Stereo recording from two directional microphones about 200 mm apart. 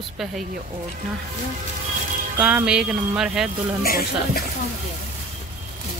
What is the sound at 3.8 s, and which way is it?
Speech, 50° left (ahead or behind).